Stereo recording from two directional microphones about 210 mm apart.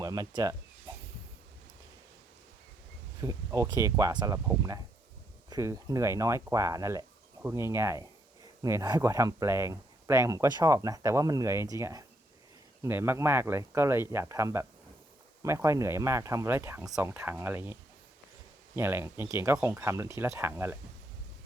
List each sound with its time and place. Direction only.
0.0 s speech: 15° right (ahead or behind)
3.2 s speech: 15° right (ahead or behind)
18.8 s speech: 10° right (ahead or behind)